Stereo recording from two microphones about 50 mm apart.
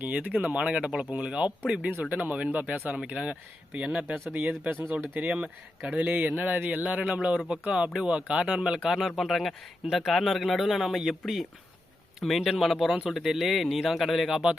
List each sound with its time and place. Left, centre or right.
0.1 s speech: right
4.0 s speech: right
5.3 s speech: right
6.8 s speech: right
9.2 s speech: centre